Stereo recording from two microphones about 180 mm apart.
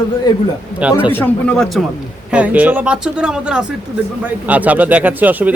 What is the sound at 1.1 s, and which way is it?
Speech, 10° left (ahead or behind).